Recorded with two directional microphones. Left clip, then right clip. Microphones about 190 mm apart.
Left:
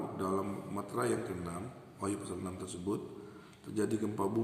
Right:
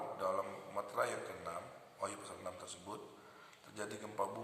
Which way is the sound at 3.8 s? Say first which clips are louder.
Left 11 dB; 5° right (ahead or behind).